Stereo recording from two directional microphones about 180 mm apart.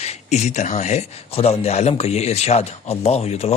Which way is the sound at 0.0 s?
40° left (ahead or behind).